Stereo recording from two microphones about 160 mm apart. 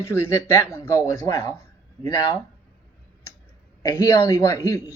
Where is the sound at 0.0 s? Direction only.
15° left (ahead or behind).